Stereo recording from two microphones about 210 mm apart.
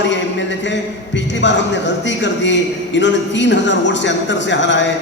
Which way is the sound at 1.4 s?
60° left (ahead or behind).